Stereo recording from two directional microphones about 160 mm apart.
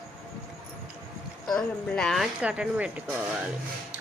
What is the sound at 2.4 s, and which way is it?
Speech, 5° right (ahead or behind).